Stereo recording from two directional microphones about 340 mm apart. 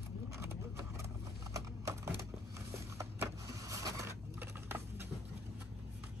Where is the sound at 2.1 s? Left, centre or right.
Centre.